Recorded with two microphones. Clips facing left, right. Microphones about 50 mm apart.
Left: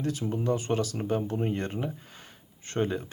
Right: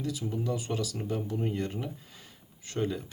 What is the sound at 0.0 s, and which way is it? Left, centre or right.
Speech, left.